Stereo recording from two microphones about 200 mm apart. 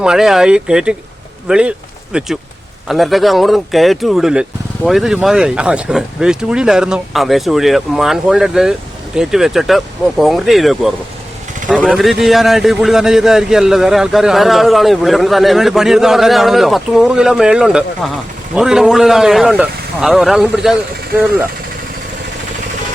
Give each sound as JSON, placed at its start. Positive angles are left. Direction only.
{"t": 0.0, "sound": "a man's voice", "side_deg": -5}